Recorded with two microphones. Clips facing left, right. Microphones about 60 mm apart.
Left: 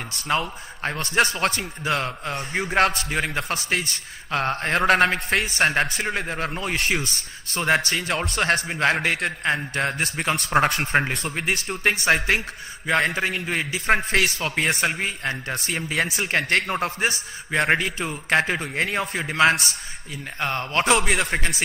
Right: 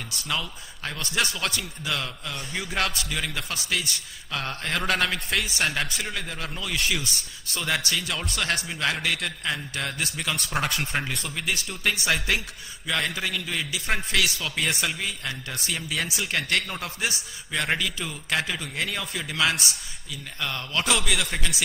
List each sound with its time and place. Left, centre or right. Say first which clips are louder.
0.1 s a man's voice: left 7 dB; left